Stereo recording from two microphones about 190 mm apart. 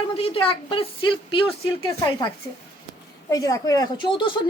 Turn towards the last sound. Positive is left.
turn(degrees=25)  # may be behind; listen again after turning